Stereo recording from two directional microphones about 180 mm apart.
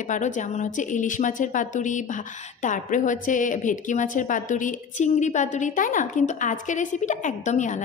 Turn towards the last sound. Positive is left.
turn(degrees=40)  # may be behind; listen again after turning